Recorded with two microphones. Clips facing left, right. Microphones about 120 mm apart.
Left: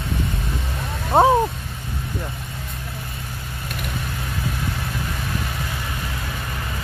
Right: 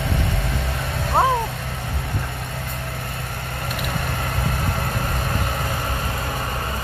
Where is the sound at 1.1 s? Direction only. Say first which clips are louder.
Left 4 dB; 20° left (ahead or behind).